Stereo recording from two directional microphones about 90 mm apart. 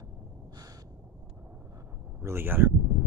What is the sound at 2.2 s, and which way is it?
Speech, 25° right (ahead or behind).